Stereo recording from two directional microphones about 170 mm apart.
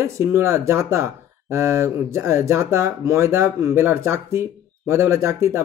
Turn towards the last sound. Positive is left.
turn(degrees=-15)  # may be behind; listen again after turning